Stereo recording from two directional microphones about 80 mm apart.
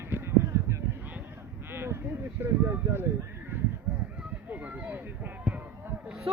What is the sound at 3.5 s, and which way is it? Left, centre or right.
Honk, right.